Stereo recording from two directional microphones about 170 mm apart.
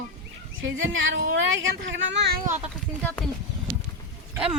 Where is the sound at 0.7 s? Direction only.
90° right.